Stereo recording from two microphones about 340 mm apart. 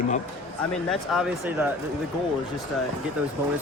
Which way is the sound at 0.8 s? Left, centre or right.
Centre.